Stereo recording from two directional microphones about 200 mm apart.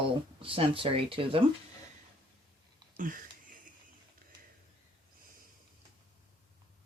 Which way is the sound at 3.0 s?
40° right (ahead or behind).